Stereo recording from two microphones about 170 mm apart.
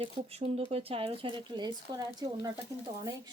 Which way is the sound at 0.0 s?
35° right (ahead or behind).